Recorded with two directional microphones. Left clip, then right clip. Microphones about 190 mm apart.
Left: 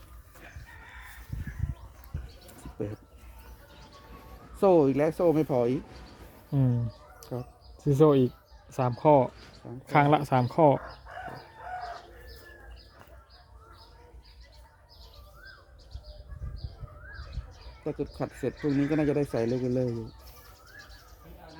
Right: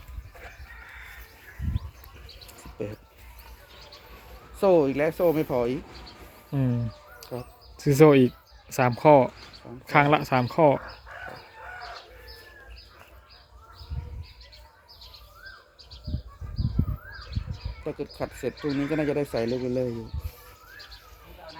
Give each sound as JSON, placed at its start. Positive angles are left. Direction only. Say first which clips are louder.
{"t": 2.7, "sound": "speech", "louder": "right 2 dB", "side_deg": 55}
{"t": 4.6, "sound": "speech", "louder": "right 1 dB", "side_deg": 65}
{"t": 6.5, "sound": "speech", "louder": "right 1 dB", "side_deg": 15}
{"t": 7.2, "sound": "bird", "louder": "right 2 dB", "side_deg": 60}
{"t": 7.8, "sound": "speech", "louder": "right 5 dB", "side_deg": -10}
{"t": 9.8, "sound": "speech", "louder": "right 2 dB", "side_deg": 15}
{"t": 17.8, "sound": "speech", "louder": "right 1 dB", "side_deg": 60}